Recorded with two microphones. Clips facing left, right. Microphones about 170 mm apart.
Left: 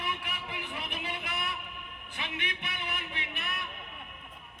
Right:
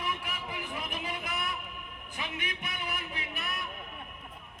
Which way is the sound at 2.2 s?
45° right (ahead or behind).